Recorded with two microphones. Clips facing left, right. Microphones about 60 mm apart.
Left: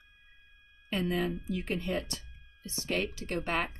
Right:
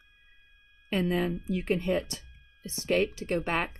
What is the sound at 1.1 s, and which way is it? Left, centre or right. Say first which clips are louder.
Speech: right 3 dB; right.